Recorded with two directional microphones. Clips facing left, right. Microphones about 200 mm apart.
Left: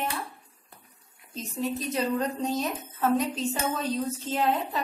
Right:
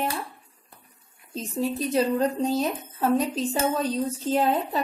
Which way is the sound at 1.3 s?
35° right (ahead or behind).